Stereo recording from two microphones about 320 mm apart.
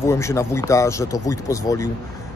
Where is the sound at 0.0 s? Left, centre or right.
Centre.